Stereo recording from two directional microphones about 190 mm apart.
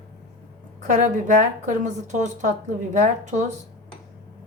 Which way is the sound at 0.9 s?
45° right (ahead or behind).